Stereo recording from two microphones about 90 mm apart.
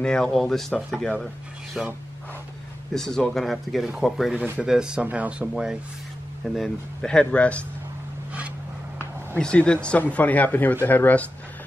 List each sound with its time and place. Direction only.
0.0 s speech: 10° left (ahead or behind)
1.8 s speech: 5° right (ahead or behind)
2.9 s speech: 5° left (ahead or behind)
6.4 s speech: 5° left (ahead or behind)
9.4 s speech: 10° left (ahead or behind)